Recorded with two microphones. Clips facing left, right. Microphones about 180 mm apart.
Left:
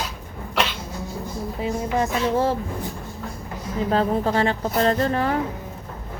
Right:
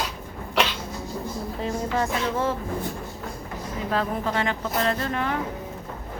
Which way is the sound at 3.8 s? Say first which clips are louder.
Left 5 dB; 35° left (ahead or behind).